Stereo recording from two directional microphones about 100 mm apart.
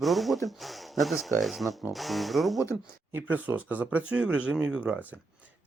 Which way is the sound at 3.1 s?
15° right (ahead or behind).